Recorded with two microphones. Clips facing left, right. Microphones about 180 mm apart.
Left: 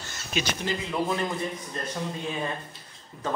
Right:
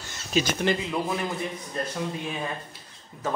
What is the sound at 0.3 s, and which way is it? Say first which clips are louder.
Speech: right 5 dB; 40° right (ahead or behind).